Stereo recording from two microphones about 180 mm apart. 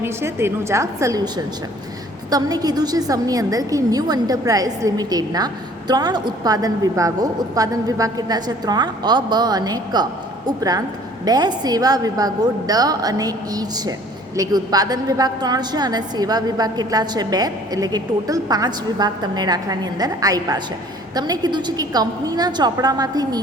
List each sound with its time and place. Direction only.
0.0 s a woman's voice: 15° right (ahead or behind)
2.3 s a woman's voice: 20° right (ahead or behind)